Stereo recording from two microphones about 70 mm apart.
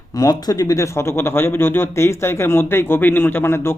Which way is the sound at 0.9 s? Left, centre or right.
Left.